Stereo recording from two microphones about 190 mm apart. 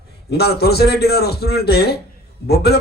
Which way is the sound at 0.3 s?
55° left (ahead or behind).